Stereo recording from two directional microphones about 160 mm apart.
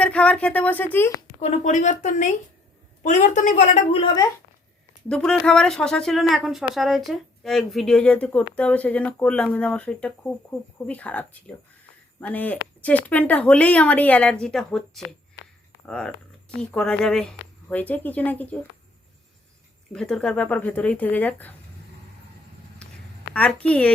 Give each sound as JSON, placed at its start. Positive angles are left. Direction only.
{"t": 0.0, "sound": "speech", "side_deg": 10}
{"t": 1.4, "sound": "a woman's voice", "side_deg": 45}
{"t": 5.0, "sound": "speech", "side_deg": 5}
{"t": 19.9, "sound": "speech", "side_deg": 5}
{"t": 23.3, "sound": "a woman's voice", "side_deg": 5}